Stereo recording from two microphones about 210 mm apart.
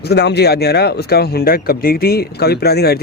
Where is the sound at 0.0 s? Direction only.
50° left (ahead or behind).